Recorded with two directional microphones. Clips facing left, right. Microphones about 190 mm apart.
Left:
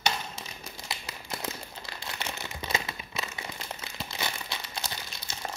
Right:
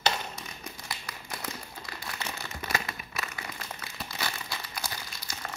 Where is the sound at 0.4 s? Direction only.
25° left (ahead or behind).